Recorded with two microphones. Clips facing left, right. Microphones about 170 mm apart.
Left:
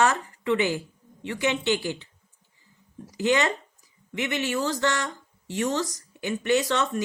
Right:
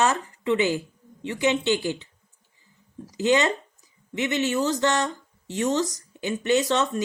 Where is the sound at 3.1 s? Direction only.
20° right (ahead or behind).